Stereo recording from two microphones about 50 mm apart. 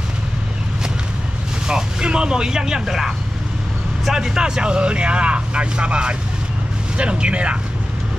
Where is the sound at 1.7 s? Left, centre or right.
Centre.